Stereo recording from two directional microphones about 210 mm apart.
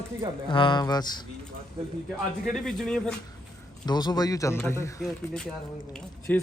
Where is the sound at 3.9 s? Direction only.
20° left (ahead or behind).